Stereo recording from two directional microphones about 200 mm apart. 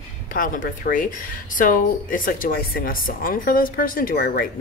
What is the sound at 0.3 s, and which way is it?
Speech, 45° left (ahead or behind).